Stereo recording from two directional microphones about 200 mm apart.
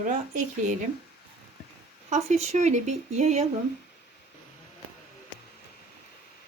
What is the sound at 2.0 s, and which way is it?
Speech, 35° right (ahead or behind).